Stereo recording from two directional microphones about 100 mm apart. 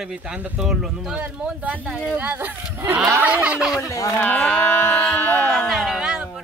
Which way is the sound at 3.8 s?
35° left (ahead or behind).